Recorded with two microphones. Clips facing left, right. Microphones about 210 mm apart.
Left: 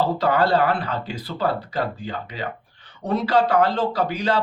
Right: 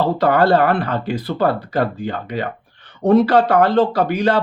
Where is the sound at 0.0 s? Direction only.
60° right (ahead or behind).